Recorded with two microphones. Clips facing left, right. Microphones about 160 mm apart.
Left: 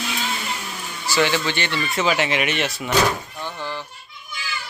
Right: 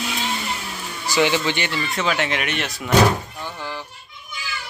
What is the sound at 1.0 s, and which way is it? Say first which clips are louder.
Speech: right 1 dB; 15° right (ahead or behind).